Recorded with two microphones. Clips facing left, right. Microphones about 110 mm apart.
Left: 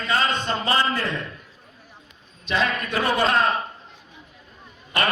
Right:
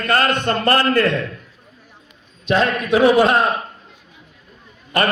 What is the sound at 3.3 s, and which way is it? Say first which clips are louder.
Speech: right 4 dB; 65° right (ahead or behind).